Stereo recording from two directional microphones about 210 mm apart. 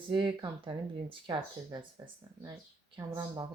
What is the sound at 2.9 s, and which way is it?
Speech, 20° right (ahead or behind).